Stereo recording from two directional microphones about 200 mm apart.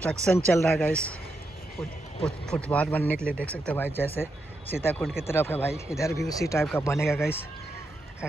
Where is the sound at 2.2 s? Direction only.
5° left (ahead or behind).